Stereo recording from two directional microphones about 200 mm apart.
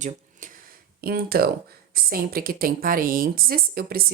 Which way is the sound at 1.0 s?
50° right (ahead or behind).